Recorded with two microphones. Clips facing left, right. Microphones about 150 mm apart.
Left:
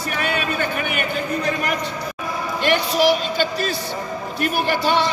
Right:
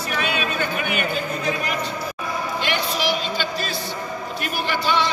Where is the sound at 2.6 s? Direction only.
45° left (ahead or behind).